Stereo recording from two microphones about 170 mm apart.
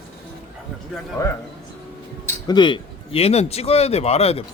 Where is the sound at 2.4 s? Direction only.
25° left (ahead or behind).